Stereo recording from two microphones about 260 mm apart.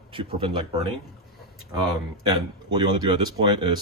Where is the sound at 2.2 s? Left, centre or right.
Centre.